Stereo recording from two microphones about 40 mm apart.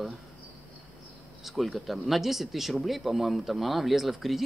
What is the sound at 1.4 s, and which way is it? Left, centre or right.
Speech, centre.